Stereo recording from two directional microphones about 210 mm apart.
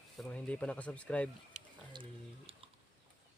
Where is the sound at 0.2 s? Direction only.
5° left (ahead or behind).